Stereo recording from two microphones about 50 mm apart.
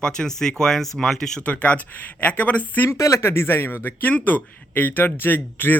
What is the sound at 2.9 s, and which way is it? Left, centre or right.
Speech, left.